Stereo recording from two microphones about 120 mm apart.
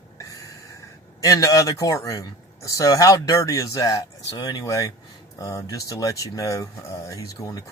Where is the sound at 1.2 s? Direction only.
25° left (ahead or behind).